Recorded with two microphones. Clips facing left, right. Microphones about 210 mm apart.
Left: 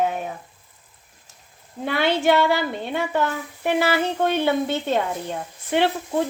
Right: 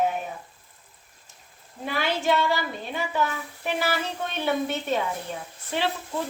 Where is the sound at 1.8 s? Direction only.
65° left (ahead or behind).